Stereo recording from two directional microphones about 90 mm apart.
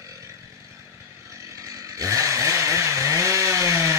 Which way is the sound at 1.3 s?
35° right (ahead or behind).